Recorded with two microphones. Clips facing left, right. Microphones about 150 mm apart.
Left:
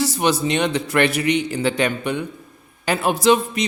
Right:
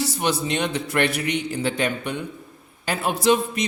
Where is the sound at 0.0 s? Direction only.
90° left.